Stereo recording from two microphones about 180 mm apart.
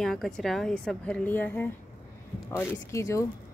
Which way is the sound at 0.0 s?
Centre (ahead or behind).